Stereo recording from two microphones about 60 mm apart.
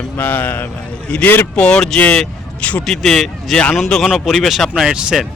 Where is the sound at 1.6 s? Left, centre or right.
Centre.